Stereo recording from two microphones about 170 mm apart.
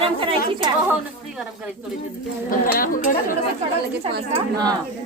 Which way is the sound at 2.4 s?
55° left (ahead or behind).